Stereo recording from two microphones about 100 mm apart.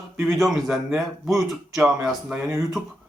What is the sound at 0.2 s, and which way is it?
A man's voice, centre (ahead or behind).